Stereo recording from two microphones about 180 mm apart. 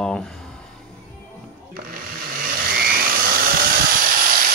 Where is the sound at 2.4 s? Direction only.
55° right (ahead or behind).